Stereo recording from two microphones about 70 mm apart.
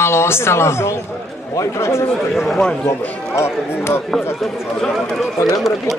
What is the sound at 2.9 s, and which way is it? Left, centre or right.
Speech, left.